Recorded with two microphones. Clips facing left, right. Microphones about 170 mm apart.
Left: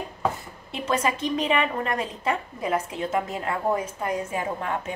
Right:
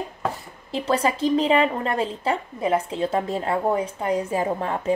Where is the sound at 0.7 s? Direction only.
30° right (ahead or behind).